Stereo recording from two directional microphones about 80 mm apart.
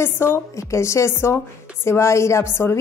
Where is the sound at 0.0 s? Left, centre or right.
Left.